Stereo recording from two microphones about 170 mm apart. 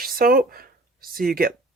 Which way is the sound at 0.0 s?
60° right (ahead or behind).